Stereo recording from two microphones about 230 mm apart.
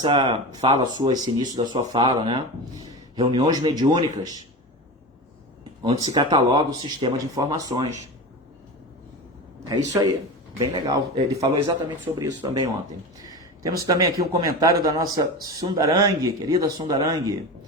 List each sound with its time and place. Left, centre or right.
0.0 s speech: right
5.8 s speech: centre
9.6 s speech: centre
13.2 s a sound: centre
13.8 s speech: centre